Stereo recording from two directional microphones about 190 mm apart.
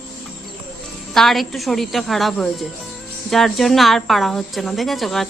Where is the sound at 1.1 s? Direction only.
Centre (ahead or behind).